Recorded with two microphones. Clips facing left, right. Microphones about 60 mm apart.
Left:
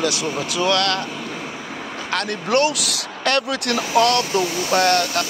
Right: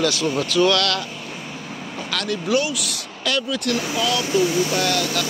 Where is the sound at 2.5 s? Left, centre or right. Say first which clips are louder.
Left 4 dB; left.